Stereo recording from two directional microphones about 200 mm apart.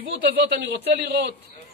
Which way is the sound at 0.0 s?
65° right (ahead or behind).